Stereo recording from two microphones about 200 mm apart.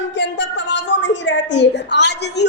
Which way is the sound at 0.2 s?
60° left (ahead or behind).